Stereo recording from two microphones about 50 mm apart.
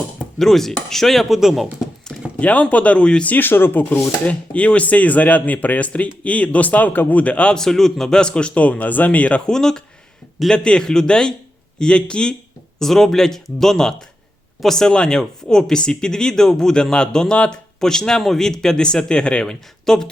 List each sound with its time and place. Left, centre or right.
0.3 s speech: centre
2.4 s speech: left
3.2 s speech: left
4.3 s speech: left
7.5 s speech: centre; by 9.4 s left
9.5 s speech: centre
12.8 s speech: centre